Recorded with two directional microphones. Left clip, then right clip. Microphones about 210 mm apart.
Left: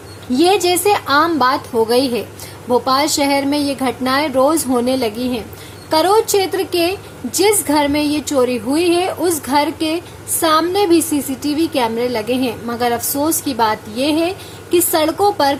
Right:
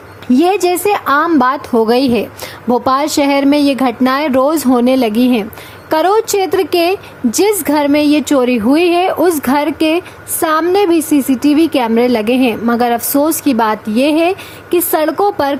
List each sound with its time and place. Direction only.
0.3 s a woman's voice: 30° right (ahead or behind)